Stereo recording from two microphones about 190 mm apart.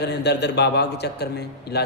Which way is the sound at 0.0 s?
60° left (ahead or behind).